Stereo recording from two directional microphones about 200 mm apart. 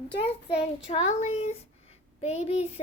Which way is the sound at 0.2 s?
30° left (ahead or behind).